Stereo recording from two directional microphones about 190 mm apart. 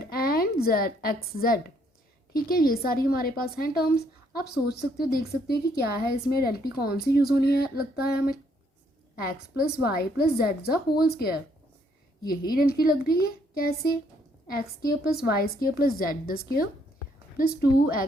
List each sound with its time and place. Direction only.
0.0 s a woman's voice: 55° left (ahead or behind)
9.2 s a woman's voice: 55° left (ahead or behind)